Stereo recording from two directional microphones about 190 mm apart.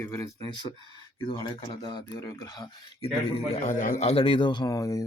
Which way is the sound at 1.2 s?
25° left (ahead or behind).